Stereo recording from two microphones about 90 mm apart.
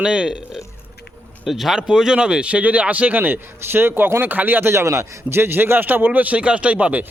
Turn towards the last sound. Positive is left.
turn(degrees=-15)  # may be behind; listen again after turning